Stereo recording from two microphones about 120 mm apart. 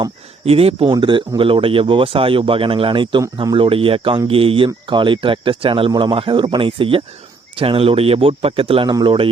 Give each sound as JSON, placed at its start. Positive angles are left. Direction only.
{"t": 0.4, "sound": "speech", "side_deg": -55}
{"t": 0.9, "sound": "speech", "side_deg": -40}
{"t": 8.9, "sound": "speech", "side_deg": -35}